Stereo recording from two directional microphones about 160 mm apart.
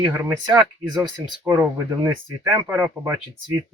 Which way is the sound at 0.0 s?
15° right (ahead or behind).